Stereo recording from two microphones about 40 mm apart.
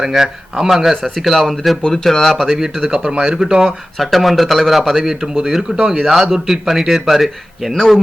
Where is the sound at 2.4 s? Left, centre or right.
Centre.